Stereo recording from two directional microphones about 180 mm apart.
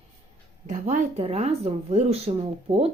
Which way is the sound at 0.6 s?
45° right (ahead or behind).